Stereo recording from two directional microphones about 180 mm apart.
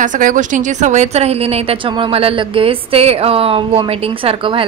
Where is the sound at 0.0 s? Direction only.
45° right (ahead or behind).